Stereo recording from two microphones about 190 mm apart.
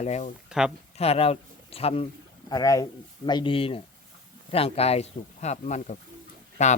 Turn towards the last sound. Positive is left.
turn(degrees=40)  # may be behind; listen again after turning